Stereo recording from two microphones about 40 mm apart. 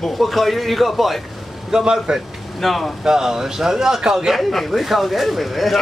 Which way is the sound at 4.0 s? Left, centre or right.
Right.